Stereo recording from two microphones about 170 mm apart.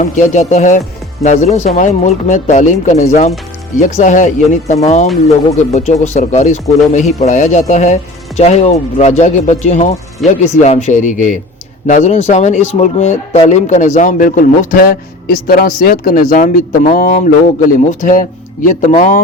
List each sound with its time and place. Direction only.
0.0 s speech: 45° left (ahead or behind)